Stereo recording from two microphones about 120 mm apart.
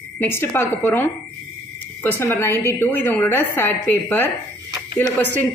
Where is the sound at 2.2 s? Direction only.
20° left (ahead or behind).